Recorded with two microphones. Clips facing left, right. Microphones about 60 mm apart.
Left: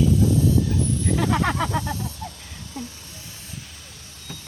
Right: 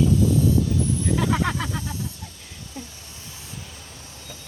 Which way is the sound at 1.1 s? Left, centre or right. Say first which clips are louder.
Left 2 dB; centre.